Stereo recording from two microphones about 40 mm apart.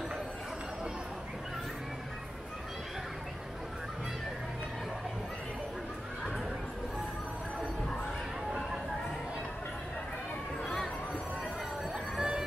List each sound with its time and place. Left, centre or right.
12.2 s music: centre